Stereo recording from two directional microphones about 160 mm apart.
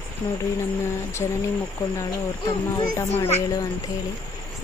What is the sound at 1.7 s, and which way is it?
A woman's voice, 20° left (ahead or behind).